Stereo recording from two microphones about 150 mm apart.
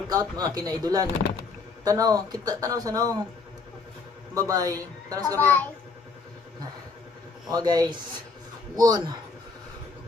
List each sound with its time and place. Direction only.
0.1 s a man's voice: 25° right (ahead or behind)
4.4 s a man's voice: 25° right (ahead or behind)
5.4 s a child's voice: 10° left (ahead or behind)
7.5 s a man's voice: 25° right (ahead or behind)